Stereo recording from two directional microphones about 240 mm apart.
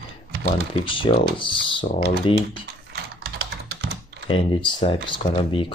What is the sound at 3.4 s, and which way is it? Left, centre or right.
Typing, right.